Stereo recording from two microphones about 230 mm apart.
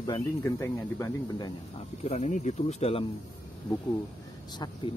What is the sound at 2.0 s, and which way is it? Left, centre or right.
Speech, left.